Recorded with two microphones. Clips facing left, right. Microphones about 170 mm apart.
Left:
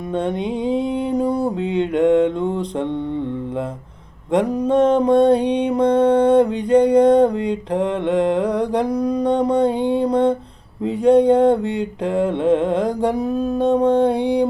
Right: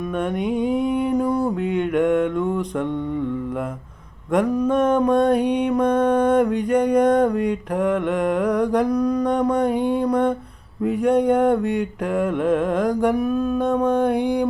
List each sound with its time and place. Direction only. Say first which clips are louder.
0.3 s mantra: even; 25° left (ahead or behind)
4.3 s mantra: left 1 dB; 30° left (ahead or behind)